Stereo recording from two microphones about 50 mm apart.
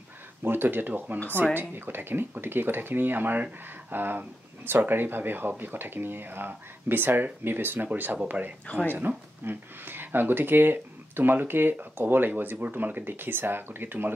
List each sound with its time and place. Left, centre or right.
0.4 s speech: right